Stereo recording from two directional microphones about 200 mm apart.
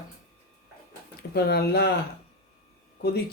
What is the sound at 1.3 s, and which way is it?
Speech, 55° left (ahead or behind).